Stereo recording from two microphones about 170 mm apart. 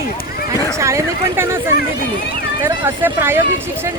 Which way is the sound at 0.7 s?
15° right (ahead or behind).